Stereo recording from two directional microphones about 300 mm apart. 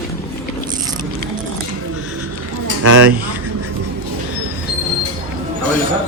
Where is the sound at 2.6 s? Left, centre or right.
Right.